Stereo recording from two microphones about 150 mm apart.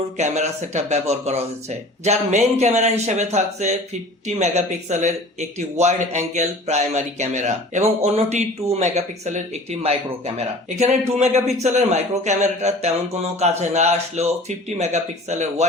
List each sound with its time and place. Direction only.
0.2 s speech: 50° right (ahead or behind)